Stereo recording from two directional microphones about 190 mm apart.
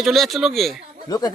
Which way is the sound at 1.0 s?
20° left (ahead or behind).